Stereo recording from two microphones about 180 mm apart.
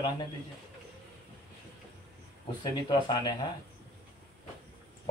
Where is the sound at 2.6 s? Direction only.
25° left (ahead or behind).